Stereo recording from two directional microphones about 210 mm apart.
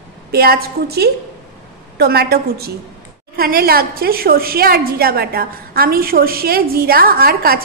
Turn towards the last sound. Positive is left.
turn(degrees=-45)  # may be behind; listen again after turning